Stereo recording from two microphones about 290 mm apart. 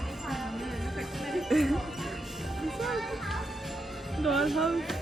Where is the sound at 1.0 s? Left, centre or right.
Centre.